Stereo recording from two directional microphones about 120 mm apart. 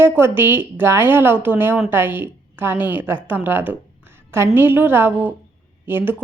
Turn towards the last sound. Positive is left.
turn(degrees=-15)  # may be behind; listen again after turning